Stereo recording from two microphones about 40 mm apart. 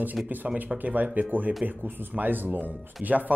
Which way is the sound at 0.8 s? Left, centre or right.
Right.